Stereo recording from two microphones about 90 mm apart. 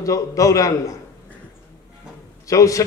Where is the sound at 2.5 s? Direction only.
35° left (ahead or behind).